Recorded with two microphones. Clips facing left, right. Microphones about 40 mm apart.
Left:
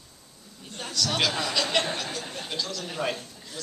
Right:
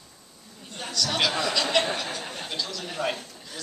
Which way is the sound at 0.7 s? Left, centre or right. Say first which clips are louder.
Even; centre.